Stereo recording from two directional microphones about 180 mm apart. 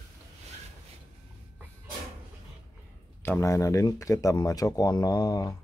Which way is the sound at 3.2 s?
15° left (ahead or behind).